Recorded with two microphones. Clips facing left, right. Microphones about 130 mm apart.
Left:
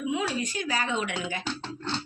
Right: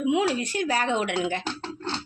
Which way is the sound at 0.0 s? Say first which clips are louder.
Right 5 dB; 70° right (ahead or behind).